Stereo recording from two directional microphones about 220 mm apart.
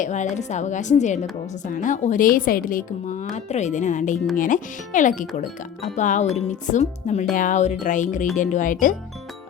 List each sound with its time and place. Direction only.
0.0 s a woman's voice: 35° left (ahead or behind)